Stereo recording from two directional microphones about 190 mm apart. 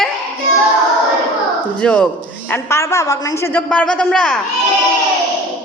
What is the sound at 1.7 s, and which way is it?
A woman's voice, 5° left (ahead or behind).